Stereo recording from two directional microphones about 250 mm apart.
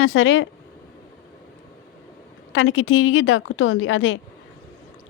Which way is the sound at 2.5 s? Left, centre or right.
Left.